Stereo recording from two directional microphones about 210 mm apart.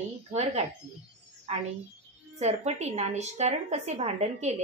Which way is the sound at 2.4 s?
30° right (ahead or behind).